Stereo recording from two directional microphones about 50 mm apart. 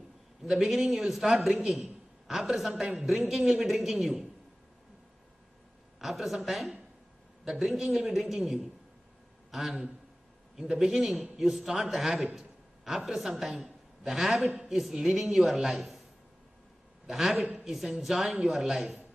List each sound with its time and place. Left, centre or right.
0.4 s a man's voice: centre
5.9 s a man's voice: centre
17.0 s a man's voice: centre